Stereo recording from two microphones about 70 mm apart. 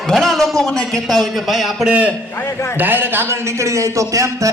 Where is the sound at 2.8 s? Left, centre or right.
Right.